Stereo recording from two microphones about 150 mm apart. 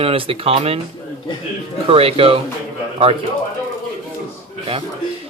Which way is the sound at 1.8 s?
40° right (ahead or behind).